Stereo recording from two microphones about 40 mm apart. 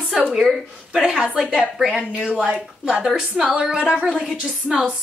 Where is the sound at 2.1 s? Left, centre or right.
Right.